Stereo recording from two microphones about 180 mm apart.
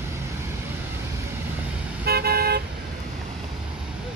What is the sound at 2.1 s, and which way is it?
Car, 60° right (ahead or behind).